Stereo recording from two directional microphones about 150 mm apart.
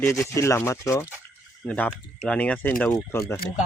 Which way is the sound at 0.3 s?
20° left (ahead or behind).